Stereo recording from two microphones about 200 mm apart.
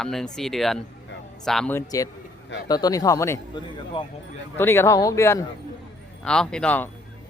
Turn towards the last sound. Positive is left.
turn(degrees=10)  # may be behind; listen again after turning